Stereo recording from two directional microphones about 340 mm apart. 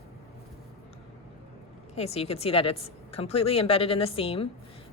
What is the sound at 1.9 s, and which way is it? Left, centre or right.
A woman's voice, centre.